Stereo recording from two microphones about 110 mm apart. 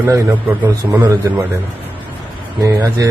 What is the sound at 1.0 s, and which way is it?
Speech, 30° right (ahead or behind).